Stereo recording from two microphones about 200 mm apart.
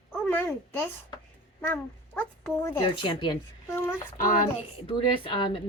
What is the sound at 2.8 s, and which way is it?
Speech, 25° left (ahead or behind).